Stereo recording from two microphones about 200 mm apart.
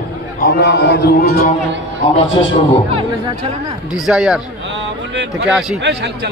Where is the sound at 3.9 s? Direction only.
5° right (ahead or behind).